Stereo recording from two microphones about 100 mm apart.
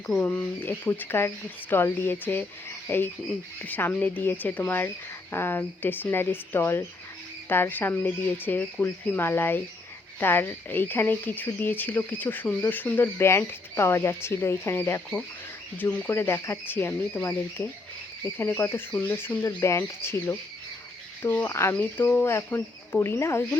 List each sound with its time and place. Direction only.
0.2 s speech: 15° left (ahead or behind)
18.3 s speech: 25° left (ahead or behind)